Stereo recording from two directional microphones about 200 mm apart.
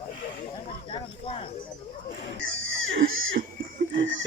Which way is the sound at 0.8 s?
25° left (ahead or behind).